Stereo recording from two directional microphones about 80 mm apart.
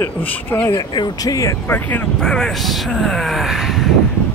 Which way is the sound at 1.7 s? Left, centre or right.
Left.